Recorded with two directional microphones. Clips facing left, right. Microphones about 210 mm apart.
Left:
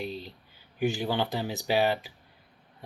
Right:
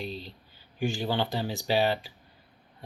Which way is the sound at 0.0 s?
15° left (ahead or behind).